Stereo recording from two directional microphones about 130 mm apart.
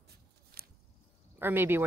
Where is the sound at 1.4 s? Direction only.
15° right (ahead or behind).